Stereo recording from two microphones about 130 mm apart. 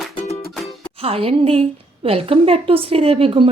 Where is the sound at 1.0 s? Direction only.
50° right (ahead or behind).